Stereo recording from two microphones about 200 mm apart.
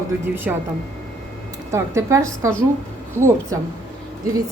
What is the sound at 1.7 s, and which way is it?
A woman's voice, 15° right (ahead or behind).